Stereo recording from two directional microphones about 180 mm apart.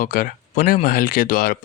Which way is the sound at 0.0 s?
50° left (ahead or behind).